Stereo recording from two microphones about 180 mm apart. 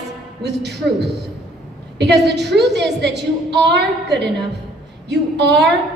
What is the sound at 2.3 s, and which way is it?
A woman's voice, 70° right (ahead or behind).